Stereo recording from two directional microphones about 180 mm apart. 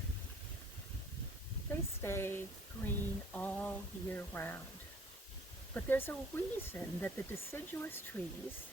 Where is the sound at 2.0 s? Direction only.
15° left (ahead or behind).